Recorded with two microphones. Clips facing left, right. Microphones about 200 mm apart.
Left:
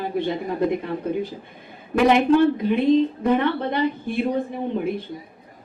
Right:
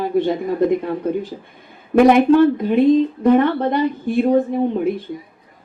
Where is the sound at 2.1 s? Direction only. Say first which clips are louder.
Right 3 dB; 50° right (ahead or behind).